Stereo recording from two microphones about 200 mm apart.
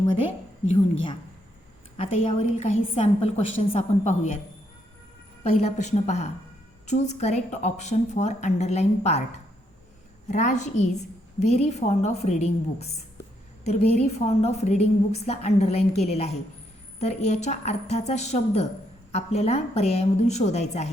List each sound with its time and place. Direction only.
2.4 s a woman's voice: 35° left (ahead or behind)
5.4 s a woman's voice: 30° left (ahead or behind)
10.2 s a woman's voice: 35° left (ahead or behind)